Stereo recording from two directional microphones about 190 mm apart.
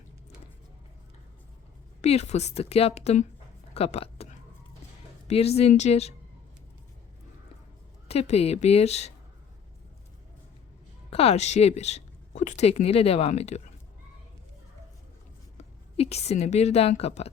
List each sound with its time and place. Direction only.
2.0 s a woman's voice: 35° left (ahead or behind)
8.0 s a woman's voice: 35° left (ahead or behind)
11.1 s a woman's voice: 30° left (ahead or behind)
16.0 s a woman's voice: 35° left (ahead or behind)